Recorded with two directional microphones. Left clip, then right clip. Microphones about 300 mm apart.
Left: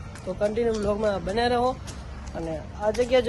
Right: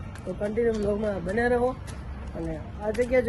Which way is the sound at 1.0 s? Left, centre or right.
Centre.